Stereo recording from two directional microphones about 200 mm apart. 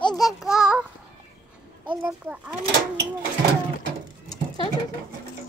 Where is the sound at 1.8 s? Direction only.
10° right (ahead or behind).